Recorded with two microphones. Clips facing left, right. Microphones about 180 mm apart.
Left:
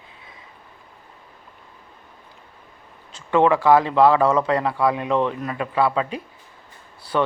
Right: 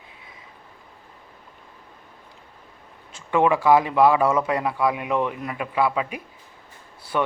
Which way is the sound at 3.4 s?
15° right (ahead or behind).